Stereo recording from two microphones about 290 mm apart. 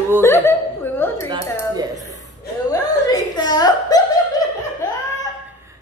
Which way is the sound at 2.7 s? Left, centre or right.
Centre.